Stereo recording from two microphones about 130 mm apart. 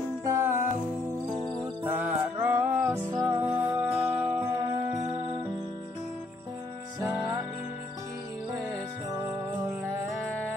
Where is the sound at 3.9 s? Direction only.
5° right (ahead or behind).